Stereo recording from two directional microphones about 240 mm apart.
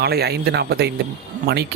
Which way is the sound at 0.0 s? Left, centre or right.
Right.